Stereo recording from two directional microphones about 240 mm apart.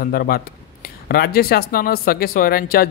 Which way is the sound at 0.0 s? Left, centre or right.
Left.